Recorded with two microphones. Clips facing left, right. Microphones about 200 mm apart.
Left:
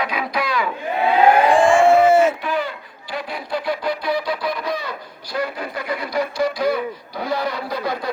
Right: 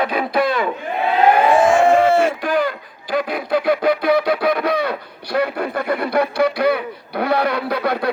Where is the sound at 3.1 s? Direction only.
55° right (ahead or behind).